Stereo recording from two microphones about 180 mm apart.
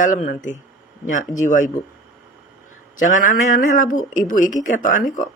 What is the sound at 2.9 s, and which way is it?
Speech, 45° left (ahead or behind).